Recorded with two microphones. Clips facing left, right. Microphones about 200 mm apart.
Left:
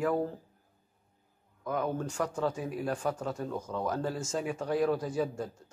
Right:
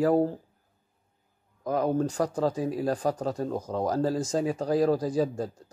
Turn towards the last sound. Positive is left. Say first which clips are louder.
# right 5 dB
turn(degrees=-35)  # may be behind; listen again after turning